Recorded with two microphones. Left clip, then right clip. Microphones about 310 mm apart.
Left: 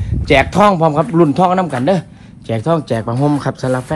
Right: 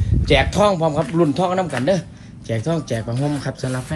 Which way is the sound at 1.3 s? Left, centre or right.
Centre.